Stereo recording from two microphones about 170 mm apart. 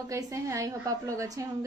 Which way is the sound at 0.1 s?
20° right (ahead or behind).